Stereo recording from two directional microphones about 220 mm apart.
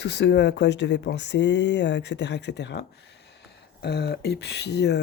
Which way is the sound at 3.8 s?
50° left (ahead or behind).